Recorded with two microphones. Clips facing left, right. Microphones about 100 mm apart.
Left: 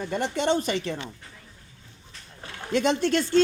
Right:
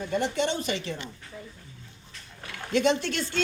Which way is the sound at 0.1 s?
50° left (ahead or behind).